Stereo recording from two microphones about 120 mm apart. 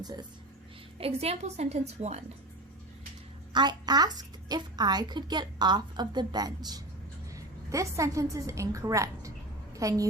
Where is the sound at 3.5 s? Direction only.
35° right (ahead or behind).